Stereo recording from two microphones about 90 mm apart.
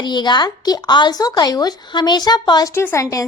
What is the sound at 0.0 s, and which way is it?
Speech, 55° left (ahead or behind).